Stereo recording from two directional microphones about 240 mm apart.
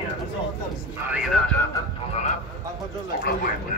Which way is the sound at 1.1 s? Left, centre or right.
Centre.